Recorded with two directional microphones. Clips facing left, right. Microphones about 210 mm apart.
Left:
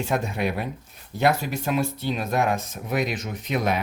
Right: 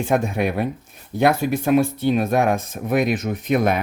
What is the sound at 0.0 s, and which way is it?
Speech, 50° right (ahead or behind).